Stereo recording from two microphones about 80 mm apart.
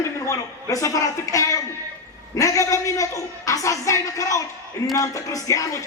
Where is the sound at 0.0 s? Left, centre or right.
Left.